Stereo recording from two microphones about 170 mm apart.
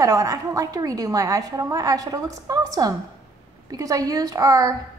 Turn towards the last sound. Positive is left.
turn(degrees=-20)  # may be behind; listen again after turning